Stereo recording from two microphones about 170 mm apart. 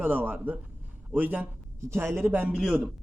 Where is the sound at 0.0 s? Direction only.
10° right (ahead or behind).